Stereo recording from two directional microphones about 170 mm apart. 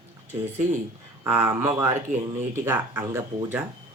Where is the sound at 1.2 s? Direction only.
15° right (ahead or behind).